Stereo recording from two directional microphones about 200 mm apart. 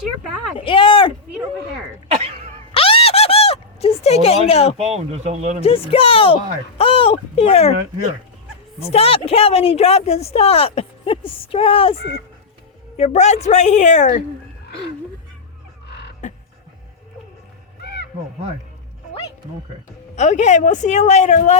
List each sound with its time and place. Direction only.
0.6 s speech: 25° left (ahead or behind)
2.0 s cough: 30° right (ahead or behind)
2.7 s a sound: 30° left (ahead or behind)
4.8 s speech: 30° right (ahead or behind)
5.6 s speech: 30° left (ahead or behind)
8.9 s speech: 30° left (ahead or behind)
13.0 s speech: 35° left (ahead or behind)
16.2 s a sound: 40° left (ahead or behind)
20.1 s speech: 35° left (ahead or behind)